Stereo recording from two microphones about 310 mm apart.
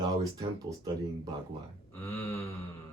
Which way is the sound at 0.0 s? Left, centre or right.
Centre.